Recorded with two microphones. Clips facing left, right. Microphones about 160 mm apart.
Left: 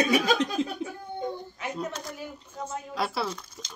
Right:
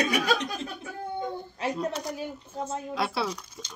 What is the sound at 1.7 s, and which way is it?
Speech, 5° left (ahead or behind).